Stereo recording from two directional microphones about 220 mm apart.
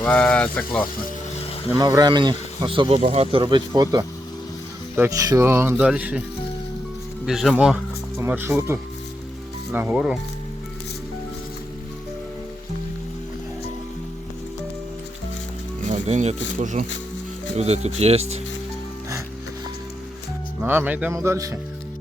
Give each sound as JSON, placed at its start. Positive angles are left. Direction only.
{"t": 0.0, "sound": "speech", "side_deg": 5}
{"t": 1.7, "sound": "speech", "side_deg": -15}
{"t": 7.3, "sound": "speech", "side_deg": 0}
{"t": 15.9, "sound": "music", "side_deg": -30}
{"t": 16.6, "sound": "speech", "side_deg": -35}
{"t": 20.6, "sound": "speech", "side_deg": -10}